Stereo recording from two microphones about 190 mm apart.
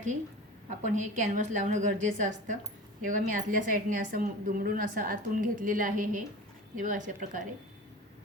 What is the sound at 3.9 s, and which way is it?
A woman's voice, 45° right (ahead or behind).